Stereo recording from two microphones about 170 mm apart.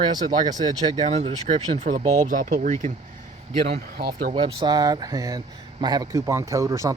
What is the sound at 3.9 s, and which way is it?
Speech, 65° right (ahead or behind).